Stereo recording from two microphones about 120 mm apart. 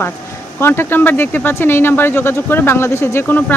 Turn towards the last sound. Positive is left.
turn(degrees=15)  # may be behind; listen again after turning